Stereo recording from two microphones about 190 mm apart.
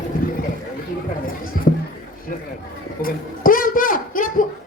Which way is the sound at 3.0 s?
45° left (ahead or behind).